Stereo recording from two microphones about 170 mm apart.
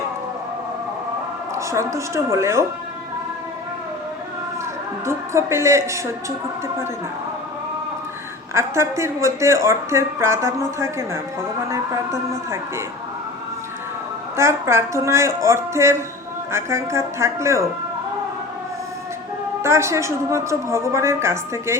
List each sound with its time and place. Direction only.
1.5 s a woman's voice: 15° right (ahead or behind)
5.0 s a woman's voice: 15° right (ahead or behind)
8.5 s a woman's voice: 15° right (ahead or behind)
14.3 s a woman's voice: 15° right (ahead or behind)
19.6 s a woman's voice: 15° right (ahead or behind)